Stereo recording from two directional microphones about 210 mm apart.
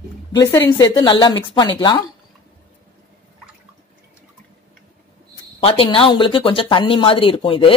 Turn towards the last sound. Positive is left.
turn(degrees=25)  # may be behind; listen again after turning